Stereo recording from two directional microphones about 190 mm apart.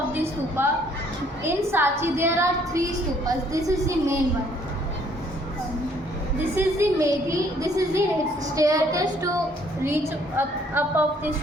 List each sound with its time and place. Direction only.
0.1 s a woman's voice: 10° right (ahead or behind)
6.6 s a woman's voice: 15° right (ahead or behind)